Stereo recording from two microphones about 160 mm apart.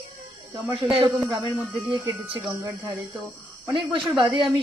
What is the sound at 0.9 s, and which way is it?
Speech, 30° right (ahead or behind).